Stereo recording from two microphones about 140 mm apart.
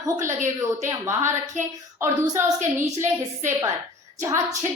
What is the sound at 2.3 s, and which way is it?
Speech, 20° right (ahead or behind).